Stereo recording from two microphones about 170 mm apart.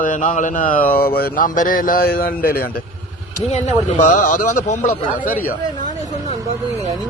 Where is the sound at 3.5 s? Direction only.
45° left (ahead or behind).